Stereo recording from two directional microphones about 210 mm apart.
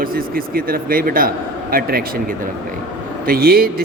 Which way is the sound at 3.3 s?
45° right (ahead or behind).